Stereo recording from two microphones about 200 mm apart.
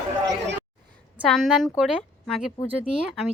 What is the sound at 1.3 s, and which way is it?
Speech, centre (ahead or behind).